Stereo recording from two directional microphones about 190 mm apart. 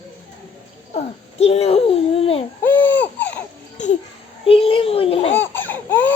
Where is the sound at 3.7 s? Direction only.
40° left (ahead or behind).